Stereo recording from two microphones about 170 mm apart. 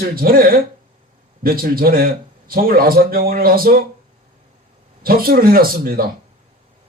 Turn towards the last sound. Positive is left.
turn(degrees=-60)  # may be behind; listen again after turning